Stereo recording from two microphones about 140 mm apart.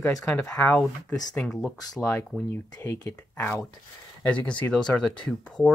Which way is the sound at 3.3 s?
15° left (ahead or behind).